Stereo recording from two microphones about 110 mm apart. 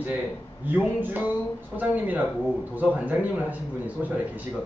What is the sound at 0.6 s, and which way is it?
Speech, 15° right (ahead or behind).